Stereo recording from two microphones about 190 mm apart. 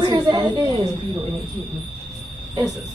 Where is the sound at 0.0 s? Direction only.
25° right (ahead or behind).